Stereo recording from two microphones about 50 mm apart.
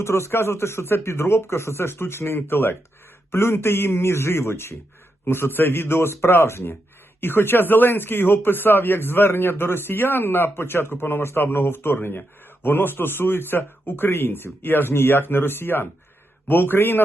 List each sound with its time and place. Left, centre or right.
0.0 s speech: left
5.2 s speech: left